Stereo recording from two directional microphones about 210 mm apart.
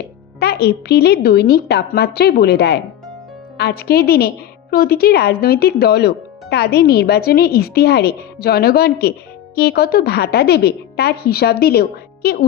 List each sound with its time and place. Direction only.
0.3 s speech: 50° left (ahead or behind)